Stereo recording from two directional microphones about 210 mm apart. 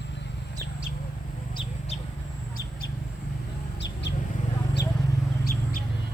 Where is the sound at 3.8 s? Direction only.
55° left (ahead or behind).